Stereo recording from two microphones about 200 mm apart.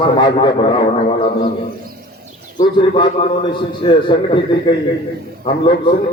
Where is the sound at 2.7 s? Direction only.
25° left (ahead or behind).